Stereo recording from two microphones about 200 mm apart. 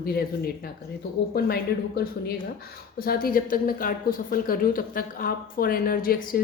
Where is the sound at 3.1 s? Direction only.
45° left (ahead or behind).